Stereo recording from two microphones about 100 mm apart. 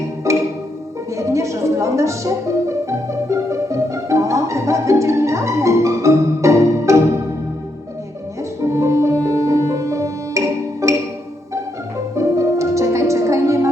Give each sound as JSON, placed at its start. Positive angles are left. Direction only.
{"t": 0.3, "sound": "music", "side_deg": -30}
{"t": 8.7, "sound": "music", "side_deg": -30}
{"t": 12.1, "sound": "music", "side_deg": -30}